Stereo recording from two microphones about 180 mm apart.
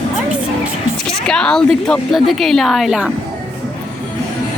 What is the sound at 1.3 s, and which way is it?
A woman's voice, 5° left (ahead or behind).